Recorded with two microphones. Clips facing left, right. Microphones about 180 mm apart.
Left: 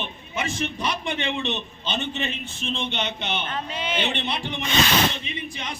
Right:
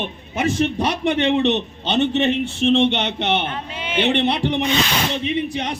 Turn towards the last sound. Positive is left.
turn(degrees=-65)  # may be behind; listen again after turning